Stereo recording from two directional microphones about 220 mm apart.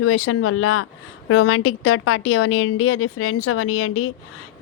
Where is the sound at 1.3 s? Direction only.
70° left (ahead or behind).